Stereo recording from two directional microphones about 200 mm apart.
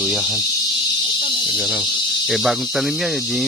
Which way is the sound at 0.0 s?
Centre (ahead or behind).